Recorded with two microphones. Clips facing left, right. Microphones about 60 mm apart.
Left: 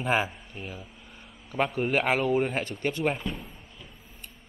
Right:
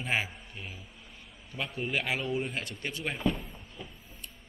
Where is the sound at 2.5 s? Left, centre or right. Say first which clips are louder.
Left 7 dB; left.